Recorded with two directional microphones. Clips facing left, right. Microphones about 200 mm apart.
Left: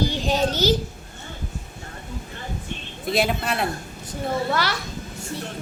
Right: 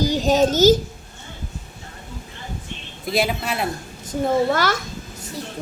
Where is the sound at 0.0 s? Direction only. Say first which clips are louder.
Right 5 dB; 40° right (ahead or behind).